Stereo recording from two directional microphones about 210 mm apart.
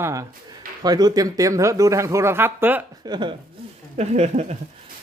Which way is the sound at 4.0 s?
30° right (ahead or behind).